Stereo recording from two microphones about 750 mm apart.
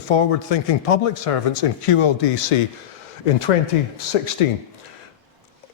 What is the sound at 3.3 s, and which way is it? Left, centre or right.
Speech, left.